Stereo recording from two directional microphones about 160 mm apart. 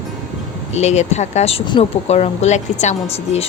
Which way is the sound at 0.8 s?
45° left (ahead or behind).